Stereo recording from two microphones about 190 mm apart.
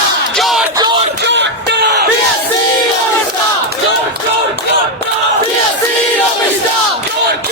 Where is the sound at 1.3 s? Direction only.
70° right (ahead or behind).